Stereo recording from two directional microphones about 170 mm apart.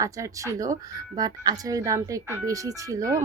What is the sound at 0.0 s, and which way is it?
Speech, 20° right (ahead or behind).